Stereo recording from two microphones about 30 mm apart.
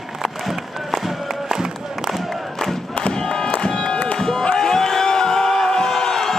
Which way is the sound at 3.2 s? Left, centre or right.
Centre.